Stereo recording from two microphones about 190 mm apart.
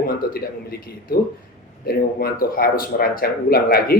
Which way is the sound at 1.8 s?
50° left (ahead or behind).